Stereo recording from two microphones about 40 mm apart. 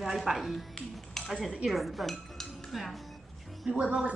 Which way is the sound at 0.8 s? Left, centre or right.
Centre.